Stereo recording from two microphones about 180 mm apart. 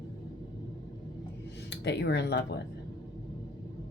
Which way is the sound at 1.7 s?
70° left (ahead or behind).